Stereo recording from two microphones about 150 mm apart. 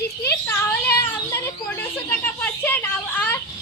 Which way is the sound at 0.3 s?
15° left (ahead or behind).